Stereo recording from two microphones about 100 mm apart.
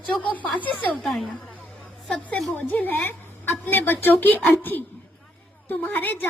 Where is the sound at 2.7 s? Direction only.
15° left (ahead or behind).